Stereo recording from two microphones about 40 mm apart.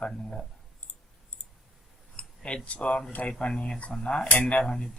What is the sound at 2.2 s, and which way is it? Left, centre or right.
Speech, left.